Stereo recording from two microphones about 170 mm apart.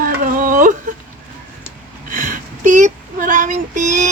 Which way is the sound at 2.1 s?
50° right (ahead or behind).